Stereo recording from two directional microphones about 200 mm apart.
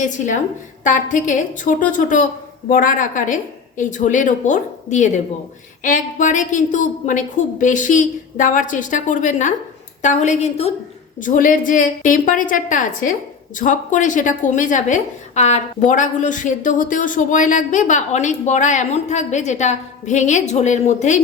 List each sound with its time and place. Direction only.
0.0 s a woman's voice: 40° left (ahead or behind)